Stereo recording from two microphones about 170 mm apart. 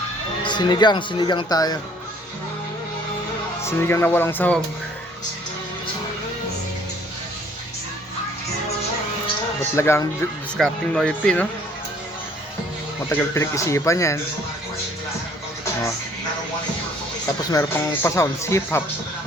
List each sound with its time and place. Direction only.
0.4 s speech: 25° left (ahead or behind)
3.6 s speech: 15° left (ahead or behind)
9.6 s speech: 15° left (ahead or behind)
10.6 s speech: 5° left (ahead or behind)
13.1 s speech: 15° left (ahead or behind)
17.5 s speech: 20° left (ahead or behind)